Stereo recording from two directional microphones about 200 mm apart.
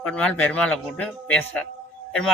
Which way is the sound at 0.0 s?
5° left (ahead or behind).